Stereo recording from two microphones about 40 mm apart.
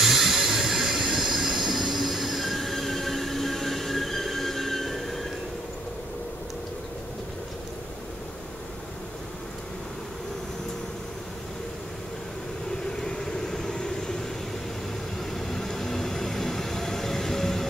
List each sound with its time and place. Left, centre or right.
0.0 s train: centre
12.9 s vehicle: centre
15.3 s vehicle: centre